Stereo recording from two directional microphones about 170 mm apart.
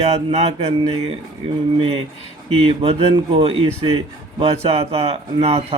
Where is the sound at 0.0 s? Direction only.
35° right (ahead or behind).